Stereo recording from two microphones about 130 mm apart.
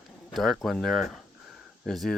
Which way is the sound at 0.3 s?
Centre (ahead or behind).